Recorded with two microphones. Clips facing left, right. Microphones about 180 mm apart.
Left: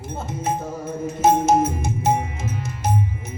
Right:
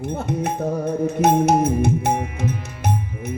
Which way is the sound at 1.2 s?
65° right (ahead or behind).